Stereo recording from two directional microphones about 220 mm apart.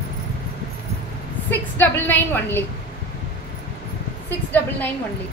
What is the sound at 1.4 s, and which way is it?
A woman's voice, 10° left (ahead or behind).